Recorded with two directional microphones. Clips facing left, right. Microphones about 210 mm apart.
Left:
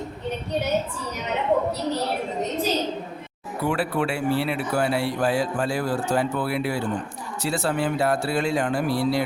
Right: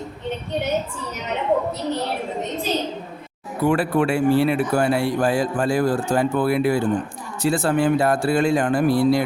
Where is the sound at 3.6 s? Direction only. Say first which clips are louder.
Right 5 dB; 45° right (ahead or behind).